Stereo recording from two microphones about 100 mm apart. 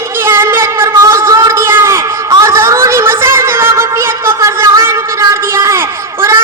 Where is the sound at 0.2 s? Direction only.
25° right (ahead or behind).